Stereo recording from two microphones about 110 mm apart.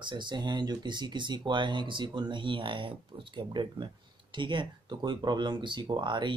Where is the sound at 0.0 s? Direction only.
45° right (ahead or behind).